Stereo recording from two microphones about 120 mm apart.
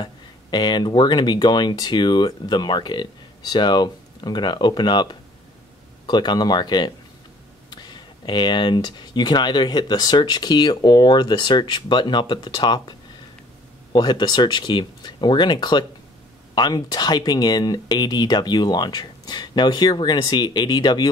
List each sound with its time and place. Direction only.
0.0 s speech: 40° left (ahead or behind)
13.9 s speech: 35° left (ahead or behind)